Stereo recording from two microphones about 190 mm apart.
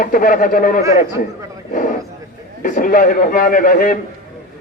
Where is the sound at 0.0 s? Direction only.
45° left (ahead or behind).